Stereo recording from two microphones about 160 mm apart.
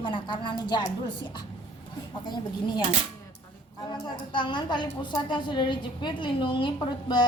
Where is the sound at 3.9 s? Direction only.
30° left (ahead or behind).